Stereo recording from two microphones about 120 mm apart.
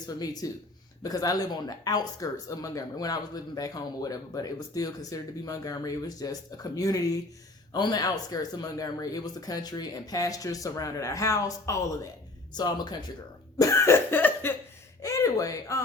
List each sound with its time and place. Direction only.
0.2 s speech: 35° left (ahead or behind)
13.6 s cough: 25° left (ahead or behind)
15.0 s a sound: 25° left (ahead or behind)